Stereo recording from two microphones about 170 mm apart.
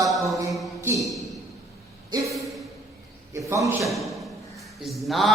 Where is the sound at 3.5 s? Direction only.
15° right (ahead or behind).